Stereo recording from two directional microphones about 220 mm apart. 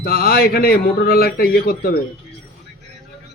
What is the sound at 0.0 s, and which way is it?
A man's voice, 45° left (ahead or behind).